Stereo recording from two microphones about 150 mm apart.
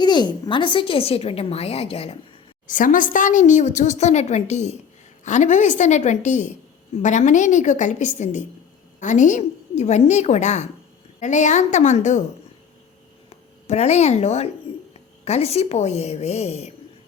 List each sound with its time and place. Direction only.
0.0 s a woman's voice: 30° left (ahead or behind)
2.6 s a woman's voice: 65° left (ahead or behind)
13.3 s a woman's voice: 50° left (ahead or behind)